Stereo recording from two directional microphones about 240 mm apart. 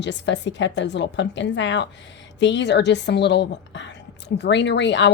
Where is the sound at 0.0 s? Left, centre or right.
Left.